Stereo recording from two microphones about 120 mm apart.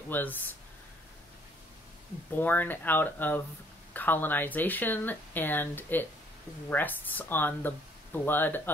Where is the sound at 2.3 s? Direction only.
15° left (ahead or behind).